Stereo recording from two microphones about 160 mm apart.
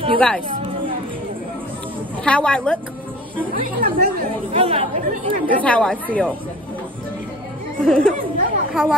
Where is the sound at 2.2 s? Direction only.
5° left (ahead or behind).